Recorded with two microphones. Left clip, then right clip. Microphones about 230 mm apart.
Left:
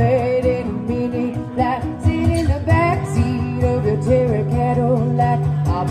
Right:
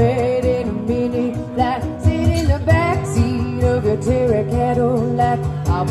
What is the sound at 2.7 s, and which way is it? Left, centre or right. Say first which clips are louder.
Music: even; right.